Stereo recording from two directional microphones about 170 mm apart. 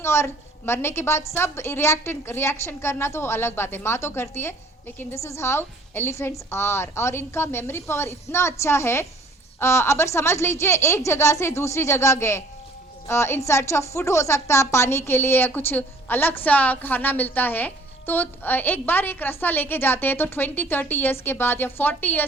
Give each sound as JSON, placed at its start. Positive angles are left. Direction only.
{"t": 0.0, "sound": "a woman's voice", "side_deg": 15}